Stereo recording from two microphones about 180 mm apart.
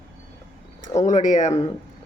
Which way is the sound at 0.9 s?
40° left (ahead or behind).